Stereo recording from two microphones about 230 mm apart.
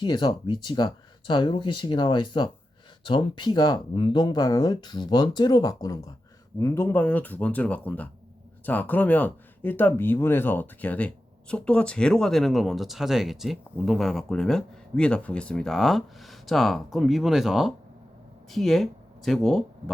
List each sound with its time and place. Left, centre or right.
0.0 s speech: centre